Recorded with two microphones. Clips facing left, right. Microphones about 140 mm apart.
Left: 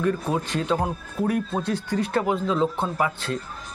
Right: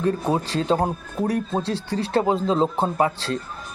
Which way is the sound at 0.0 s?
30° right (ahead or behind).